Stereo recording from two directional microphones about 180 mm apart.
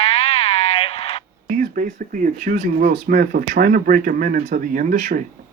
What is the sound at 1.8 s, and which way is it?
Speech, 55° right (ahead or behind).